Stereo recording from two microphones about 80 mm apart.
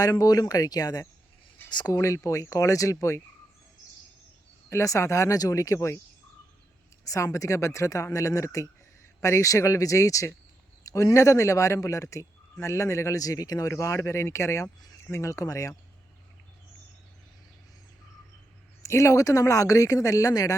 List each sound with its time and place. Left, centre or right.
0.0 s speech: left
1.9 s speech: left
4.7 s speech: left
7.0 s speech: left
18.8 s speech: left